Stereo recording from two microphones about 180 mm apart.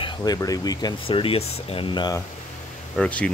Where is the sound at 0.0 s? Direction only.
20° left (ahead or behind).